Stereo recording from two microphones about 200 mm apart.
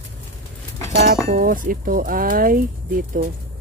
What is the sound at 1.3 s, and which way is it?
Speech, 40° right (ahead or behind).